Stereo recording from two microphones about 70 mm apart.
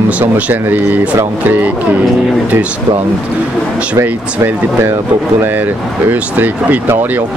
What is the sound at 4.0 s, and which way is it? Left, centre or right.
Speech, right.